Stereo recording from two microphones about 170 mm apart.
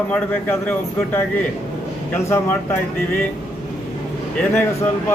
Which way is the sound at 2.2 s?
15° left (ahead or behind).